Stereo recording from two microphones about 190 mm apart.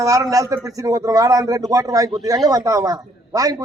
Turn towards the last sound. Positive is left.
turn(degrees=-20)  # may be behind; listen again after turning